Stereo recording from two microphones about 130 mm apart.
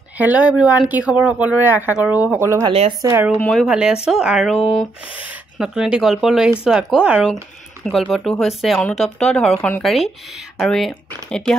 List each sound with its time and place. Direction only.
0.2 s speech: 10° right (ahead or behind); by 3.2 s 25° right (ahead or behind)
3.3 s speech: 5° left (ahead or behind)
3.6 s speech: 5° right (ahead or behind)